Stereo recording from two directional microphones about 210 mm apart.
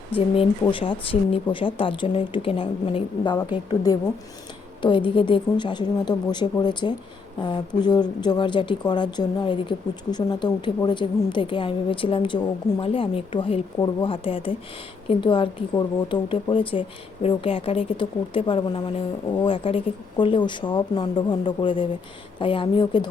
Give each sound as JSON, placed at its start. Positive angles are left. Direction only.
{"t": 0.1, "sound": "speech", "side_deg": 25}